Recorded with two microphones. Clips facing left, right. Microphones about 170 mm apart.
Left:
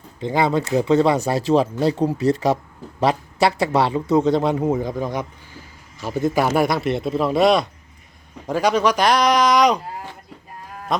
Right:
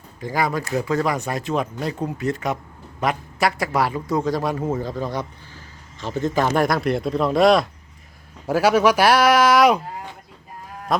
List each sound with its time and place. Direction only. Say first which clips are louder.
0.2 s a man's voice: left 4 dB; 25° left (ahead or behind); by 9.8 s 5° right (ahead or behind)